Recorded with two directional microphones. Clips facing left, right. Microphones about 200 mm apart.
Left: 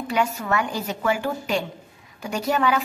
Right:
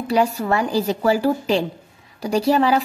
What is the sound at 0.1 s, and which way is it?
A woman's voice, 35° right (ahead or behind).